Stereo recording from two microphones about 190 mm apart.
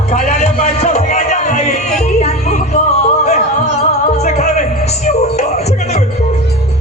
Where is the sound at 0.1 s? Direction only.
35° left (ahead or behind).